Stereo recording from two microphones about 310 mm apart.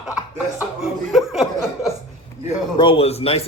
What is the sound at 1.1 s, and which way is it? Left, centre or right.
Chuckle, centre.